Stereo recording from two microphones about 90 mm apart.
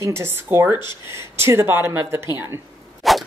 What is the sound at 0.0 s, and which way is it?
Speech, 30° right (ahead or behind).